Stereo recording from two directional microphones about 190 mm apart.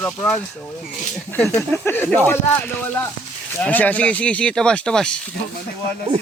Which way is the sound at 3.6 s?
10° left (ahead or behind).